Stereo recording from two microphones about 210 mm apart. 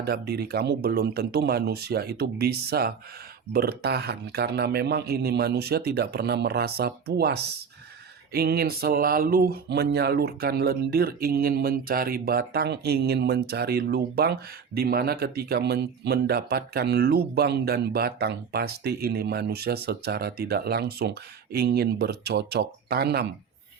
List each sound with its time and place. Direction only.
0.0 s speech: 50° right (ahead or behind)